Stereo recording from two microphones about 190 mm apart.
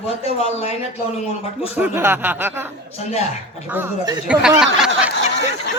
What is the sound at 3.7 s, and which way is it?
Speech, 10° right (ahead or behind).